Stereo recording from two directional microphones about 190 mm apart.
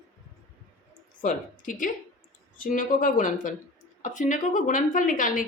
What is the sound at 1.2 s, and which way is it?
A woman's voice, 45° left (ahead or behind).